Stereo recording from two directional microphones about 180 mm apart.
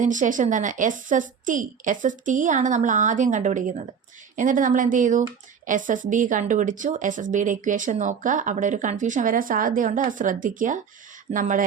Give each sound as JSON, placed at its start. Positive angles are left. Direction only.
{"t": 0.0, "sound": "a woman's voice", "side_deg": -45}